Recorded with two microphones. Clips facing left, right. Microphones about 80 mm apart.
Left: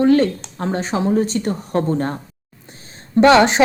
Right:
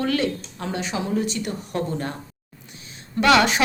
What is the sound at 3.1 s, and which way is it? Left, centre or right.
Speech, left.